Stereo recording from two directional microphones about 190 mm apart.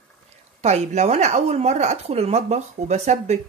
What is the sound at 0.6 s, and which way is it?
Speech, 35° right (ahead or behind).